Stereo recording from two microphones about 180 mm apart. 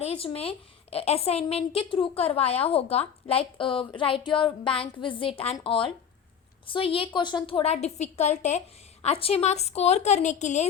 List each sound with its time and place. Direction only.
0.0 s a woman's voice: 35° left (ahead or behind)